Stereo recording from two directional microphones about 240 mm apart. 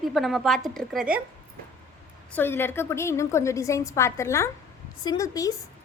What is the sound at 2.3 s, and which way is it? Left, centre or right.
A woman's voice, centre.